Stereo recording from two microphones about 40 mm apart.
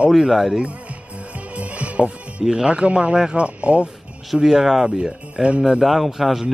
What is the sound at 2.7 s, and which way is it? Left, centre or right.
Speech, right.